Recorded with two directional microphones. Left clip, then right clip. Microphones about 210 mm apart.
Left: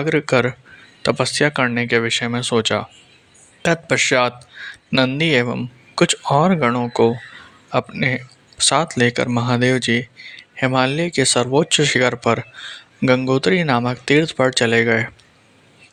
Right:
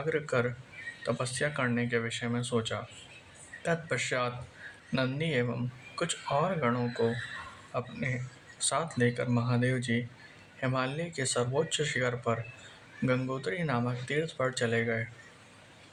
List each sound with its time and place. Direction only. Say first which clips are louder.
0.0 s speech: left 13 dB; 40° left (ahead or behind)